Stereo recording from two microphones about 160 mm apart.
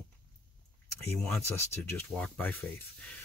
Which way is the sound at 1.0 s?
5° left (ahead or behind).